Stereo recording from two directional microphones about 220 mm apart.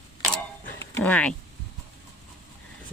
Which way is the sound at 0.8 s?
10° left (ahead or behind).